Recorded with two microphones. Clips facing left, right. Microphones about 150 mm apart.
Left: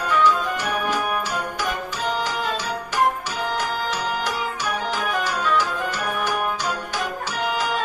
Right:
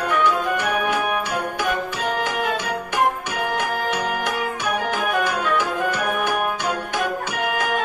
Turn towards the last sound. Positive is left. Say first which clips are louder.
# right 1 dB
turn(degrees=-55)  # may be behind; listen again after turning